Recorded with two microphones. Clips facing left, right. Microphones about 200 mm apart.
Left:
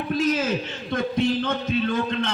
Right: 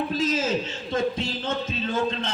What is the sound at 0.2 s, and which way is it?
A man's voice, 60° left (ahead or behind).